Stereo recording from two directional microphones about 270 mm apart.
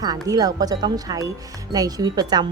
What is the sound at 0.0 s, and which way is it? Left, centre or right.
Speech, centre.